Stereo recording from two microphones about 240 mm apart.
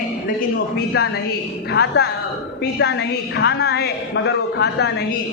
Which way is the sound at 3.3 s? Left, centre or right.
Left.